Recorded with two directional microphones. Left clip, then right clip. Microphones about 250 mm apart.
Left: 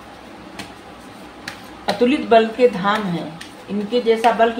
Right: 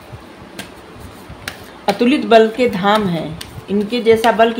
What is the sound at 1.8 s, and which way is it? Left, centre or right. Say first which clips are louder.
Speech: right 3 dB; right.